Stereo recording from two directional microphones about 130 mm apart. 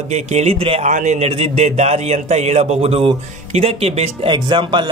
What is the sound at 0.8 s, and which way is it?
A man's voice, 70° right (ahead or behind).